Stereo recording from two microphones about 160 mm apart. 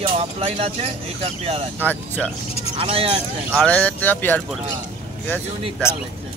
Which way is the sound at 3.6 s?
10° left (ahead or behind).